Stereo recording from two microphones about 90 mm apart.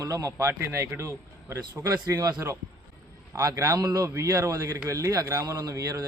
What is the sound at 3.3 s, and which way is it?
A man's voice, 40° right (ahead or behind).